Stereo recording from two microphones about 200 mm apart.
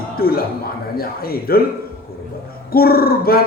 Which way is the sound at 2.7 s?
50° left (ahead or behind).